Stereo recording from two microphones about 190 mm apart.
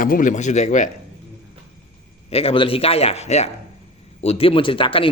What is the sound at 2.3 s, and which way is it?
A man's voice, 30° left (ahead or behind).